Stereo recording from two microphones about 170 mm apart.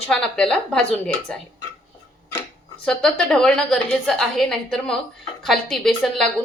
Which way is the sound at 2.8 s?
5° left (ahead or behind).